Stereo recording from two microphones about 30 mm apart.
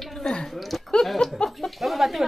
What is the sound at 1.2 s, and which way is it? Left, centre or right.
Speech, centre.